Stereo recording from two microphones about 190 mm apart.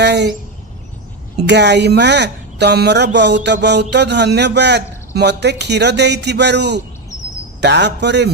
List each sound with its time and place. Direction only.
0.0 s a woman's voice: 65° right (ahead or behind)
1.4 s a woman's voice: 65° right (ahead or behind)